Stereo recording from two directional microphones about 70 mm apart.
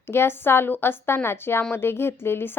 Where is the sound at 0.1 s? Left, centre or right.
Left.